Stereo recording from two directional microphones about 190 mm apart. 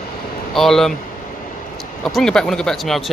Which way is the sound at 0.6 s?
Centre (ahead or behind).